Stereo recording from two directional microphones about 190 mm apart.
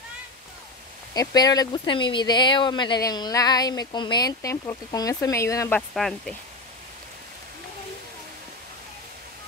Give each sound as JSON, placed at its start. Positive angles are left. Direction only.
{"t": 1.1, "sound": "speech", "side_deg": 20}
{"t": 5.8, "sound": "speech", "side_deg": 0}